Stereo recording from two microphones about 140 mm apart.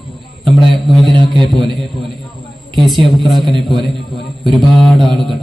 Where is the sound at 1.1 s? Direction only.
35° right (ahead or behind).